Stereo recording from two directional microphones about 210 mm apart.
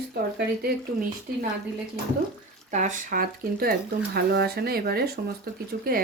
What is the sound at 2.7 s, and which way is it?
Speech, 35° right (ahead or behind).